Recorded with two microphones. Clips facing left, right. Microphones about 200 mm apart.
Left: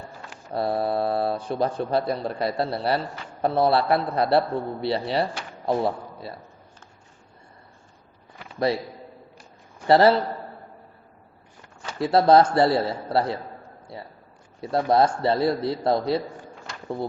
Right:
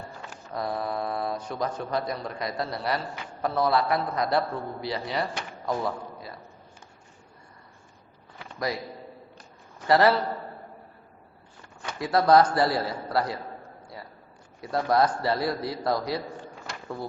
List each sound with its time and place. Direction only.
0.5 s a man's voice: 30° left (ahead or behind)
8.5 s a man's voice: 30° left (ahead or behind)
9.8 s a man's voice: 30° left (ahead or behind)
11.9 s a man's voice: 30° left (ahead or behind)
13.9 s a sound: 30° left (ahead or behind)
14.6 s a man's voice: 25° left (ahead or behind)